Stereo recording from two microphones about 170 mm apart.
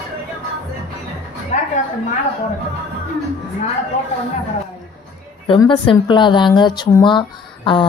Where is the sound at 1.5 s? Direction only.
45° left (ahead or behind).